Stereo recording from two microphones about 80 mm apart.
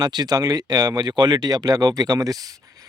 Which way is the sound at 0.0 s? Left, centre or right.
Right.